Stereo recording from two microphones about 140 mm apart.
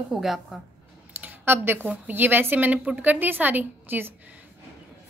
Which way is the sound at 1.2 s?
15° right (ahead or behind).